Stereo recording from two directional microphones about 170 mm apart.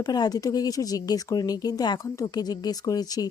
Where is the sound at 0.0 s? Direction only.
25° left (ahead or behind).